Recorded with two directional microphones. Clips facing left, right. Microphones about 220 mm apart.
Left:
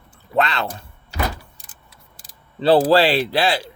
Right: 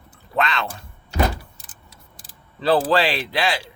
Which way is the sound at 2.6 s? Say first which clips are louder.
Left 4 dB; 35° left (ahead or behind).